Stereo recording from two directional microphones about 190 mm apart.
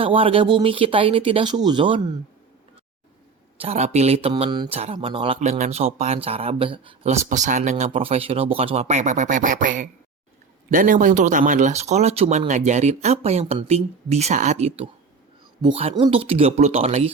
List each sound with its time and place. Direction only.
0.0 s speech: 30° right (ahead or behind)
3.6 s speech: 35° right (ahead or behind)